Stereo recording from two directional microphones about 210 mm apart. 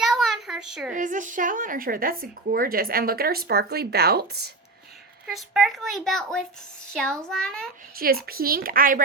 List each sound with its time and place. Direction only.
0.0 s a sound: centre (ahead or behind)
0.9 s a woman's voice: 35° right (ahead or behind)
5.2 s speech: centre (ahead or behind)
7.9 s a woman's voice: 45° right (ahead or behind)